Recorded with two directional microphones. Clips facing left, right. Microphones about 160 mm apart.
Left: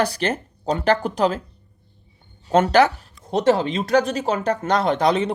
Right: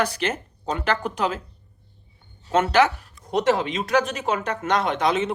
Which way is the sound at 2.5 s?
35° left (ahead or behind).